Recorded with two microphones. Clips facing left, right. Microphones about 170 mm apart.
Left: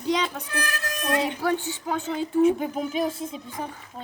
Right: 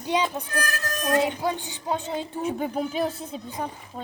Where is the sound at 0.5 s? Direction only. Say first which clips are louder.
Right 1 dB; 45° right (ahead or behind).